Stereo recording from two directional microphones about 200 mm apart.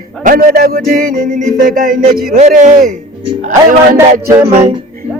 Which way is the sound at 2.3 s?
40° right (ahead or behind).